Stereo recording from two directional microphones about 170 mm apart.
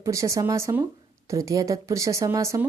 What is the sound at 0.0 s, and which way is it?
Speech, 20° right (ahead or behind).